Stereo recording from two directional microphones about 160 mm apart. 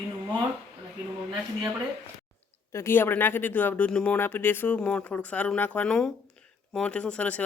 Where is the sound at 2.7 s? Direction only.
15° left (ahead or behind).